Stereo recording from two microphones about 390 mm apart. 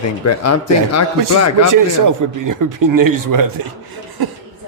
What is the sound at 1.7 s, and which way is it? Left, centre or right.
Speech, right.